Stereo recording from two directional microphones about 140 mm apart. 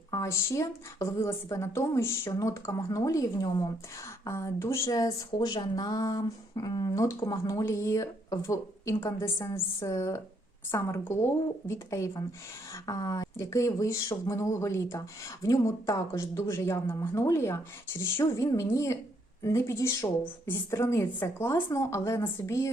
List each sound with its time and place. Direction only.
0.1 s speech: 25° left (ahead or behind)